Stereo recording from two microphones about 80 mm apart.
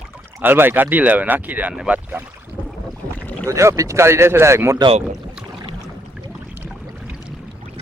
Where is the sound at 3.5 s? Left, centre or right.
Right.